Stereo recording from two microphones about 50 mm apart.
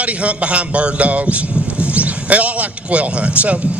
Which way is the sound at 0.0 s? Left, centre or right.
Right.